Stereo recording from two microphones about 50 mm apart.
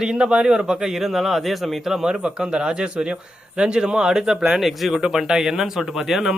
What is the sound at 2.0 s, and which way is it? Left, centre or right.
A man's voice, centre.